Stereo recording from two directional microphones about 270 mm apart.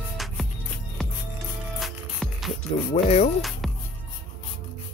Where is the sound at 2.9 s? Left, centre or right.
Left.